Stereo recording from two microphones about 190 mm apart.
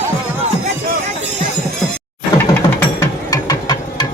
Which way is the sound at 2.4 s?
10° left (ahead or behind).